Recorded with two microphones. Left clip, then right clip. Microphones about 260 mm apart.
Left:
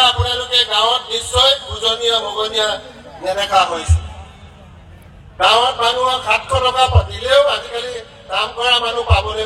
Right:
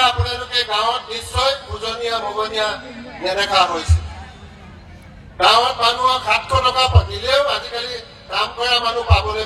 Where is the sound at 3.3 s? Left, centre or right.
Centre.